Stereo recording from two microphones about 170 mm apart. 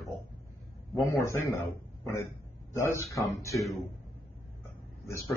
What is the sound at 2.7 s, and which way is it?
Speech, 15° left (ahead or behind).